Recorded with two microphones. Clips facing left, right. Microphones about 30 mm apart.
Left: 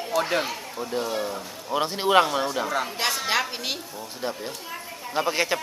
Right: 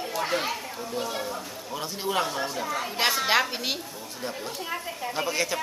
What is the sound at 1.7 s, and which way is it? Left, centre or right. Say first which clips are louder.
Speech: left 9 dB; left.